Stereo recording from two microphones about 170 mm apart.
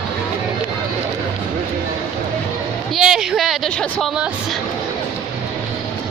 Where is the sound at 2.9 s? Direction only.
Centre (ahead or behind).